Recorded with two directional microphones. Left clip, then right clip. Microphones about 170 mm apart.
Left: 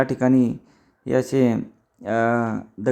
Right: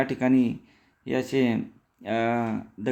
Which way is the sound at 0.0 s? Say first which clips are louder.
Left 4 dB; 20° left (ahead or behind).